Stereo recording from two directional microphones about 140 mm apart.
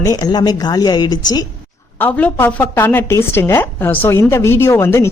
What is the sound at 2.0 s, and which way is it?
A woman's voice, 15° left (ahead or behind).